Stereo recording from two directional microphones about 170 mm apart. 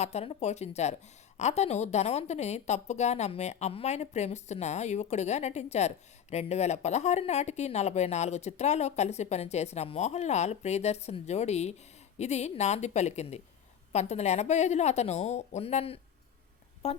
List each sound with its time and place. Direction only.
0.0 s a woman's voice: 40° left (ahead or behind)